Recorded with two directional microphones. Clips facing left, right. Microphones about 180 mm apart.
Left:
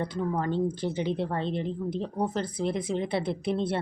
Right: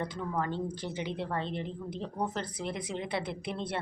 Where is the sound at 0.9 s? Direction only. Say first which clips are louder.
Left 5 dB; 30° left (ahead or behind).